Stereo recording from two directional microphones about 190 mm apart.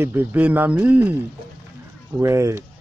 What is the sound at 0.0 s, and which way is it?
Speech, 10° right (ahead or behind).